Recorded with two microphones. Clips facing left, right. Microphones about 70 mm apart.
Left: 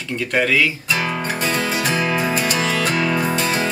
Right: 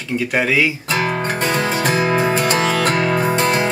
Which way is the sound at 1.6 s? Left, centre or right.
Right.